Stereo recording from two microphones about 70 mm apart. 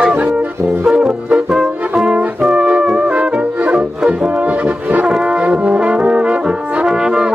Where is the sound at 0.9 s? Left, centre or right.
Centre.